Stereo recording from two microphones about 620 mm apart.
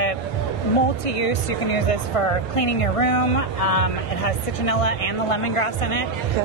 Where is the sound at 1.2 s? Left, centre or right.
Left.